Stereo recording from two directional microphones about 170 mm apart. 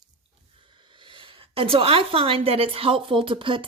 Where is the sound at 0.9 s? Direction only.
30° right (ahead or behind).